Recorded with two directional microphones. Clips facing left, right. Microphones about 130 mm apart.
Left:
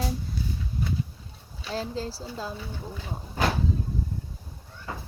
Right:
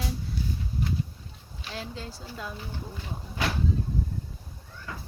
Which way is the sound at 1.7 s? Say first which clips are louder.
Left 7 dB; 35° left (ahead or behind).